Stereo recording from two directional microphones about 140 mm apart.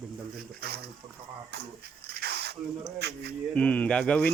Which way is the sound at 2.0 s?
90° right.